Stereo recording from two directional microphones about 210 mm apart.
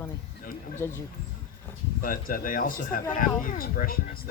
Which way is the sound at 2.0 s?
40° left (ahead or behind).